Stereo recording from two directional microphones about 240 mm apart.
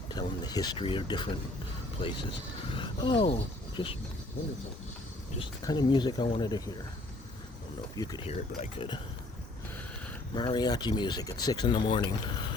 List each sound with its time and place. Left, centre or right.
0.1 s speech: centre
2.7 s speech: centre
5.4 s speech: centre
7.9 s speech: centre
10.3 s speech: centre